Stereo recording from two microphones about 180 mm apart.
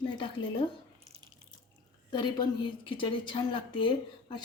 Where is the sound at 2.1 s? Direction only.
25° left (ahead or behind).